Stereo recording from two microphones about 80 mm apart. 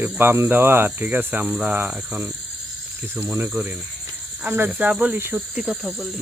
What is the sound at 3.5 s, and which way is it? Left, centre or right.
Cricket, centre.